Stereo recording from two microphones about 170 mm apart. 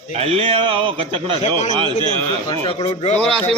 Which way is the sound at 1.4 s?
45° left (ahead or behind).